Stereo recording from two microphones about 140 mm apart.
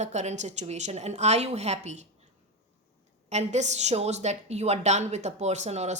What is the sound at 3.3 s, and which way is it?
A woman's voice, 55° right (ahead or behind).